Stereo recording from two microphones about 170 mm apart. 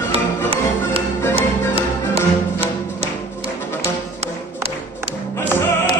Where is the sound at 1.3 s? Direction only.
35° right (ahead or behind).